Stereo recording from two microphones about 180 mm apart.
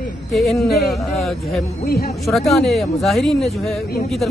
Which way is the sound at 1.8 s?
60° left (ahead or behind).